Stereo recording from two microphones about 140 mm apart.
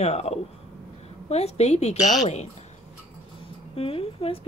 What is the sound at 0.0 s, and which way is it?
Speech, 50° left (ahead or behind).